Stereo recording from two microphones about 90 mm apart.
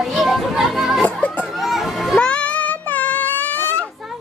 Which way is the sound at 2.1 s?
10° left (ahead or behind).